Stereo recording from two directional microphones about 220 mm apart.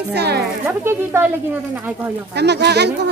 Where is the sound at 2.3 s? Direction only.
50° right (ahead or behind).